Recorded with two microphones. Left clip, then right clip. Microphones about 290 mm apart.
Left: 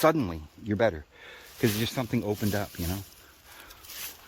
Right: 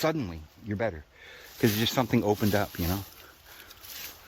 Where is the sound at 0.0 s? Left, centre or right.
Centre.